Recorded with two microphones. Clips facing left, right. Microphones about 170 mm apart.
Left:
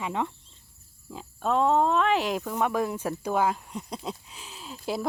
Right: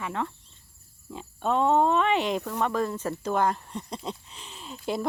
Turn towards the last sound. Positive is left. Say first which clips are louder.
# right 1 dB
turn(degrees=0)  # may be behind; listen again after turning